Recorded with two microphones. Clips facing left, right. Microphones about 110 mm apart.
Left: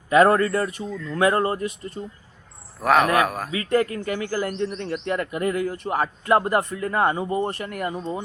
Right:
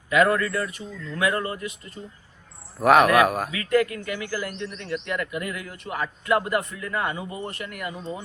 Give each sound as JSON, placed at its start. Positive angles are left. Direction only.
{"t": 0.1, "sound": "speech", "side_deg": 35}
{"t": 2.8, "sound": "speech", "side_deg": -5}
{"t": 3.5, "sound": "speech", "side_deg": 30}